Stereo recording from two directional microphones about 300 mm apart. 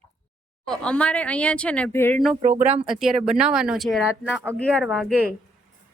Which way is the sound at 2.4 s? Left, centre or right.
Right.